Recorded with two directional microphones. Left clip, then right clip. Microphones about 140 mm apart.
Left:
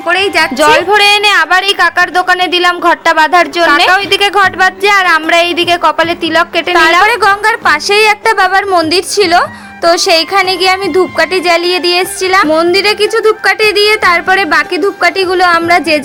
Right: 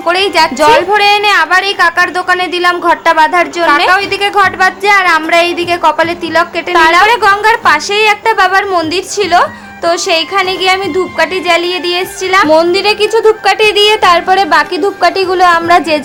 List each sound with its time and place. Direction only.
0.6 s a woman's voice: 30° left (ahead or behind)